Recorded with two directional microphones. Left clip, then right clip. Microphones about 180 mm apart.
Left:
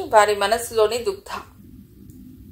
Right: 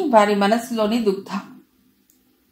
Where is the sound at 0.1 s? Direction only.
35° left (ahead or behind).